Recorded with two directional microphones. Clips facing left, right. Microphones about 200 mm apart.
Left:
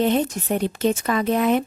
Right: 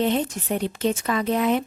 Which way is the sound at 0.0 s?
50° left (ahead or behind).